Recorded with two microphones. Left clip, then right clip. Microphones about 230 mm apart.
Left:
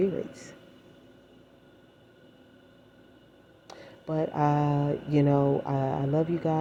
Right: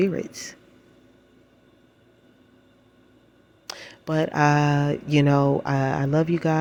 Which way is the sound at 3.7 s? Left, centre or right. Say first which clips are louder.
Right 6 dB; right.